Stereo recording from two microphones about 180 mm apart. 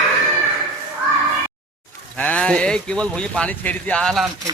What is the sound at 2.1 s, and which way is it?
Speech, 10° left (ahead or behind).